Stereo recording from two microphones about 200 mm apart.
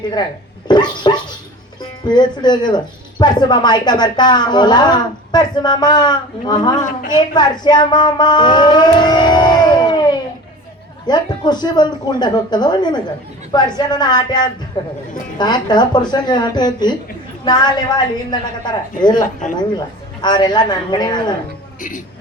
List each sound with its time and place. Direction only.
0.7 s speech: 20° left (ahead or behind)
6.7 s a woman's voice: 40° left (ahead or behind)
7.3 s a sound: 20° left (ahead or behind)
11.0 s speech: 20° left (ahead or behind)
19.2 s a woman's voice: 40° left (ahead or behind)
20.2 s speech: 20° left (ahead or behind)
21.8 s a woman's voice: 40° left (ahead or behind)